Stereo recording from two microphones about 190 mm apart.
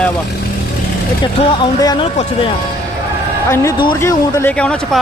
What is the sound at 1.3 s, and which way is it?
Speech, 20° left (ahead or behind).